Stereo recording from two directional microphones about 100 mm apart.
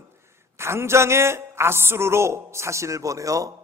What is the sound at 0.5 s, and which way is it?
A woman's voice, 25° right (ahead or behind).